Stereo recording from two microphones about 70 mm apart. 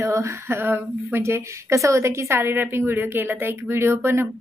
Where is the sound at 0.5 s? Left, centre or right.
Right.